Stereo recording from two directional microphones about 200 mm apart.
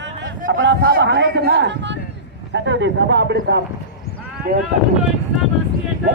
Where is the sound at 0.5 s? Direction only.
70° right (ahead or behind).